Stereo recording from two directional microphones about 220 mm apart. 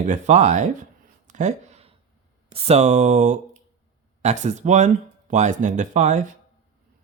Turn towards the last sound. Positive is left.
turn(degrees=-35)  # may be behind; listen again after turning